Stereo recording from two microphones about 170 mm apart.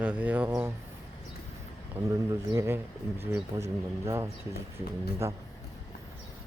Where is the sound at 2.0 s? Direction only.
15° right (ahead or behind).